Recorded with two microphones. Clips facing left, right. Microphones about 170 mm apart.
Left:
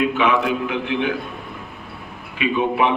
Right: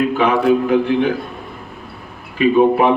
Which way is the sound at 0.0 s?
40° right (ahead or behind).